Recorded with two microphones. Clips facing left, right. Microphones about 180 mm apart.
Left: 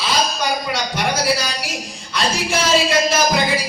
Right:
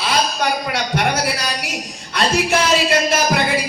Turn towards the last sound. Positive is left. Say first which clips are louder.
# even
turn(degrees=-60)  # may be behind; listen again after turning